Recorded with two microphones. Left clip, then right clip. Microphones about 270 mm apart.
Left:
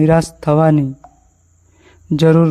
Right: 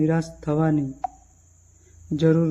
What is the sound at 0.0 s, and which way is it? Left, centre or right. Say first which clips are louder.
Speech: left 11 dB; left.